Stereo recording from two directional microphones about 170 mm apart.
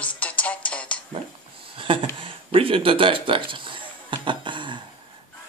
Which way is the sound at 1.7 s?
30° right (ahead or behind).